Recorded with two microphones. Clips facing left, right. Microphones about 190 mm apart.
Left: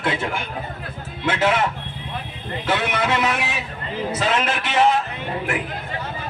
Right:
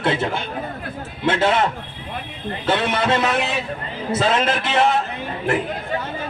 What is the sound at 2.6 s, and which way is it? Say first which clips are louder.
Speech: right 2 dB; 25° right (ahead or behind).